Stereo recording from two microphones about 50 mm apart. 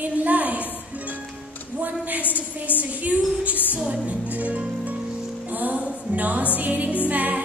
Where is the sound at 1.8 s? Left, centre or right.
Right.